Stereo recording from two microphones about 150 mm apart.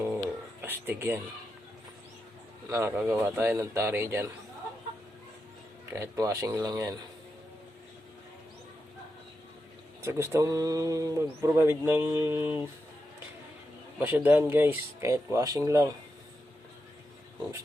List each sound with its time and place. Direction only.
0.0 s a sound: 15° right (ahead or behind)
2.6 s speech: 20° right (ahead or behind)
2.9 s speech: 5° right (ahead or behind)
5.9 s speech: 20° right (ahead or behind)
10.0 s speech: 20° right (ahead or behind)
14.0 s speech: 10° right (ahead or behind)